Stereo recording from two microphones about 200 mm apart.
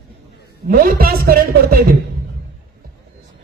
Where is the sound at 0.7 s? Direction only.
45° right (ahead or behind).